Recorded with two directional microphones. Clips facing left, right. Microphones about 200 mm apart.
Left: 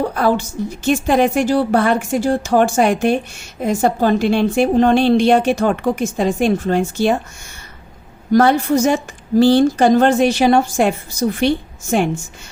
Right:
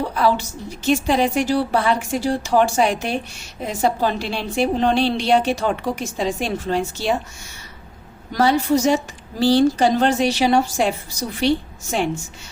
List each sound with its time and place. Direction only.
0.0 s a woman's voice: 50° left (ahead or behind)
8.3 s a woman's voice: 50° left (ahead or behind)